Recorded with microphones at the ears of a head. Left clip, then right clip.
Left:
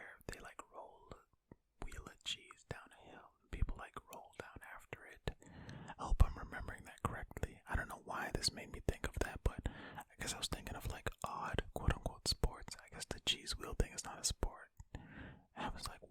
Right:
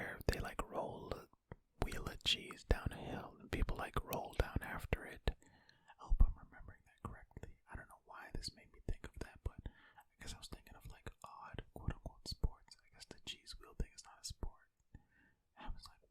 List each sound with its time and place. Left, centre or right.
0.0 s whispering: right
5.6 s whispering: left